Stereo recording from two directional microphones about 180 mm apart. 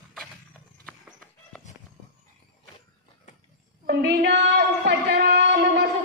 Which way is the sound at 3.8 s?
65° right (ahead or behind).